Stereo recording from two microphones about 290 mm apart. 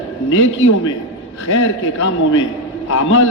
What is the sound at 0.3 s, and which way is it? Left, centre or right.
A man's voice, left.